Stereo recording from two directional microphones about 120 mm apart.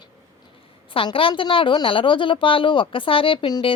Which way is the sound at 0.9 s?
45° left (ahead or behind).